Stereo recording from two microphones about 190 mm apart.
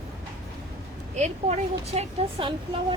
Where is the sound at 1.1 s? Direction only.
35° right (ahead or behind).